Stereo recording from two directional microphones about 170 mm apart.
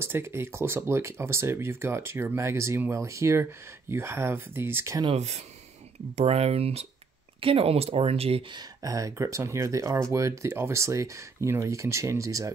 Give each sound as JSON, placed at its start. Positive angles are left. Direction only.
{"t": 0.0, "sound": "speech", "side_deg": -15}
{"t": 5.0, "sound": "speech", "side_deg": -40}
{"t": 8.8, "sound": "speech", "side_deg": -20}